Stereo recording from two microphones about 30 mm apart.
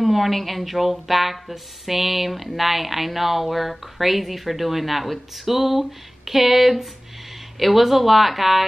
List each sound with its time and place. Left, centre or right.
0.0 s speech: centre